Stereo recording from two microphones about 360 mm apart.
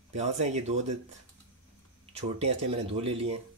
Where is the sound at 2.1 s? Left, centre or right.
Centre.